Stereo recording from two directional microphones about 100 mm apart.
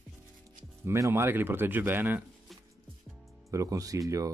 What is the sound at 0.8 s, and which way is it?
Speech, 30° right (ahead or behind).